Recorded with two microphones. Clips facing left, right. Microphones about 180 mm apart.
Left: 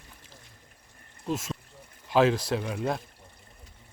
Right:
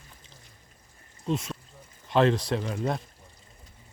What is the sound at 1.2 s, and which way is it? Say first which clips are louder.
Speech: right 2 dB; centre (ahead or behind).